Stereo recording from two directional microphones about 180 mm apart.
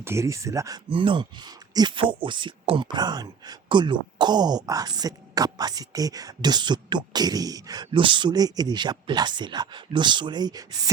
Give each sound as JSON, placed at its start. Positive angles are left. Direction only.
{"t": 0.0, "sound": "speech", "side_deg": -15}